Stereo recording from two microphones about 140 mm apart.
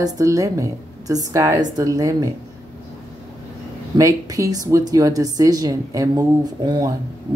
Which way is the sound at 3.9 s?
25° right (ahead or behind).